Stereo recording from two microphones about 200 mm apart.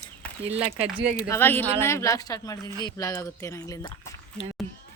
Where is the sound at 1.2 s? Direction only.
15° left (ahead or behind).